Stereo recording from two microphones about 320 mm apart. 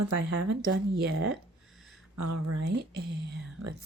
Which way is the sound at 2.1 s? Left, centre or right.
Right.